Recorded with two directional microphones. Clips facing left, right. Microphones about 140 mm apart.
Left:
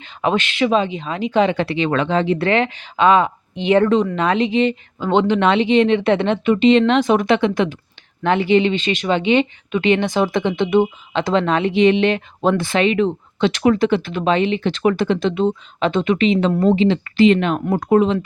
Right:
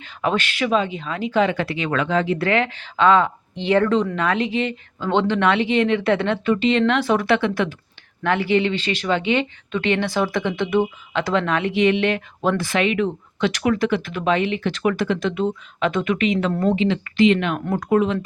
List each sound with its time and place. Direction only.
0.0 s speech: 20° left (ahead or behind)